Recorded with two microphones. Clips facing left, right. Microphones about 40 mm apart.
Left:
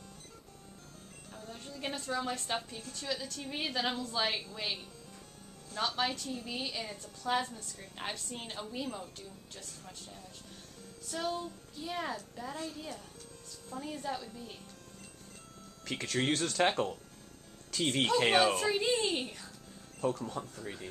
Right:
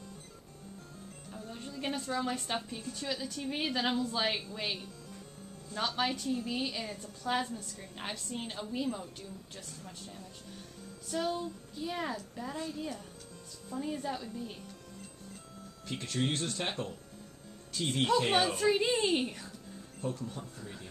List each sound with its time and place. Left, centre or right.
1.3 s a woman's voice: centre
5.8 s a woman's voice: centre
15.8 s speech: left
17.7 s speech: left
18.6 s speech: centre
20.2 s speech: left